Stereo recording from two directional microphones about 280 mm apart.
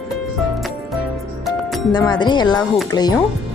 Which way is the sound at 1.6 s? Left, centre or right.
Centre.